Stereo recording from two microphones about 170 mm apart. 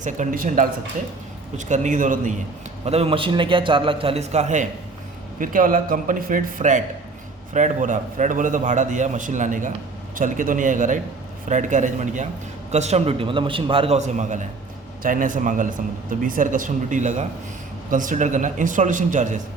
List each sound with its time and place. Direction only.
0.0 s a man's voice: 50° right (ahead or behind)
2.8 s a man's voice: 35° right (ahead or behind)